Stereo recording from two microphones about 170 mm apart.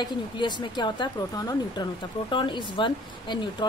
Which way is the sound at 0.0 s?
25° left (ahead or behind).